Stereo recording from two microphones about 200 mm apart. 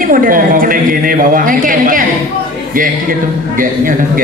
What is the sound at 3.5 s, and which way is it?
Speech, 45° right (ahead or behind).